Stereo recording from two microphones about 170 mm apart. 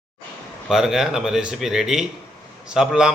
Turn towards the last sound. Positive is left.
turn(degrees=-5)  # may be behind; listen again after turning